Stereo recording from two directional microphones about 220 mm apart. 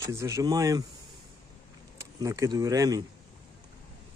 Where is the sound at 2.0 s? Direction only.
15° right (ahead or behind).